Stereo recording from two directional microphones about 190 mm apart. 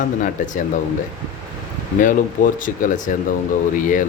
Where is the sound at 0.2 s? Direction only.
40° left (ahead or behind).